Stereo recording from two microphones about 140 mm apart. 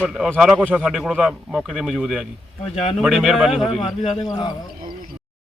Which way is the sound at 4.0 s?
35° left (ahead or behind).